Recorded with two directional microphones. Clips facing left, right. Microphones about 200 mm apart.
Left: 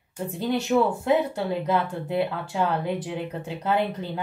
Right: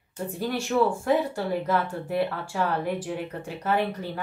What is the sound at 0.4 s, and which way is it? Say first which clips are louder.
Speech: left 2 dB; 20° left (ahead or behind).